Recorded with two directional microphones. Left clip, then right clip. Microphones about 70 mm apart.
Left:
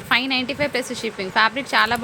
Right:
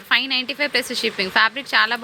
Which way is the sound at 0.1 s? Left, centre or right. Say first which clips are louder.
Right 1 dB; right.